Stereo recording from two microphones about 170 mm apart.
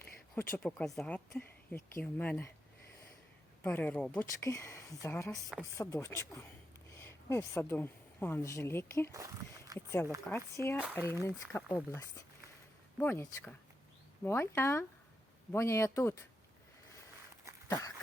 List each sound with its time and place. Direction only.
0.3 s speech: 10° left (ahead or behind)
3.6 s speech: 10° left (ahead or behind)
5.3 s speech: centre (ahead or behind)
5.7 s speech: 20° left (ahead or behind)
17.5 s a sound: 15° right (ahead or behind)